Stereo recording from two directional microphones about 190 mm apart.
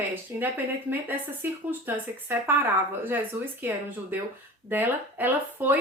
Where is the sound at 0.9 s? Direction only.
10° right (ahead or behind).